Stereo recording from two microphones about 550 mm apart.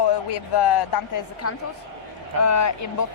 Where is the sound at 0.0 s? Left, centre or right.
Left.